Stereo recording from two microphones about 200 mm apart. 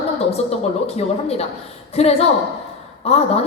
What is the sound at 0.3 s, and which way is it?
A woman's voice, 30° left (ahead or behind).